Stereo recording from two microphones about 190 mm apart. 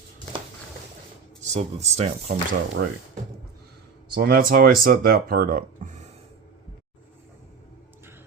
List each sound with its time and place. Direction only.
1.5 s speech: 35° right (ahead or behind)
2.8 s speech: 75° right (ahead or behind)
4.1 s speech: 55° right (ahead or behind)